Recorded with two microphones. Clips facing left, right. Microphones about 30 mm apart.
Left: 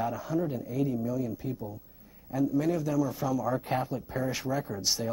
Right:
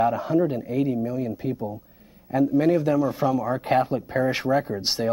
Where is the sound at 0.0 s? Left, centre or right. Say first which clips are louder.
Right 9 dB; right.